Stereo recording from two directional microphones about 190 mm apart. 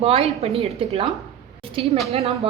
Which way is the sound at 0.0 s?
30° right (ahead or behind).